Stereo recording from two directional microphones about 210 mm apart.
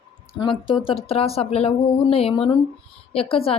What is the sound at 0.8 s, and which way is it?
A woman's voice, 25° left (ahead or behind).